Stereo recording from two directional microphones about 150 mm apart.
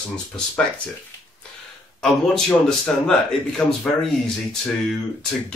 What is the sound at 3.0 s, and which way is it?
Speech, 5° left (ahead or behind).